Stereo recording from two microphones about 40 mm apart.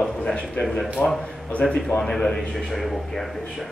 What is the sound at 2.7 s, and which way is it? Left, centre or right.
Speech, centre.